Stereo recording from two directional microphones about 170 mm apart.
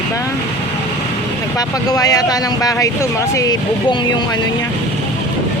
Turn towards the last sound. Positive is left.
turn(degrees=20)  # may be behind; listen again after turning